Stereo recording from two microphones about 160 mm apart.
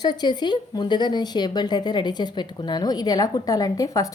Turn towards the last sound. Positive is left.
turn(degrees=20)  # may be behind; listen again after turning